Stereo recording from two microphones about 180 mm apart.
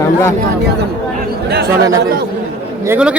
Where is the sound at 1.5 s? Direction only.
65° right (ahead or behind).